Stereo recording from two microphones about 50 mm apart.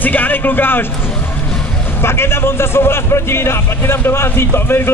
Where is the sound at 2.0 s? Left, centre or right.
Left.